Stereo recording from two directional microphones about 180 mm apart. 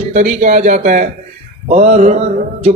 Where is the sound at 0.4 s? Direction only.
45° right (ahead or behind).